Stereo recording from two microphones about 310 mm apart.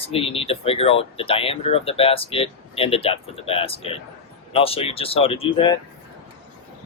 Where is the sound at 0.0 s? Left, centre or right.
Centre.